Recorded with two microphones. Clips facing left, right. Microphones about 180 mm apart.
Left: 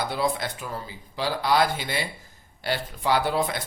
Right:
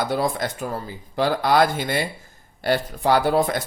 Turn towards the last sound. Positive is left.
turn(degrees=-45)  # may be behind; listen again after turning